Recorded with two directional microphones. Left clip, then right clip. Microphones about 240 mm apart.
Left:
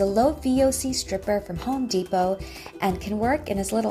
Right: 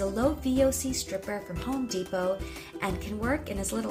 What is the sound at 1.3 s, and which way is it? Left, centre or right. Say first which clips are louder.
A woman's voice: left 8 dB; left.